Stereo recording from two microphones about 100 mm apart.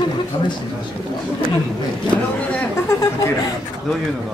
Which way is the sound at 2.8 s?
25° left (ahead or behind).